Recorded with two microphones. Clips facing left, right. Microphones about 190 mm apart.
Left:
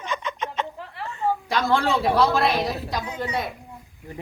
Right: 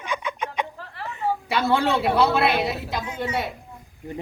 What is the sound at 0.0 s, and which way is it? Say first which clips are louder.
Fowl: even; 10° right (ahead or behind).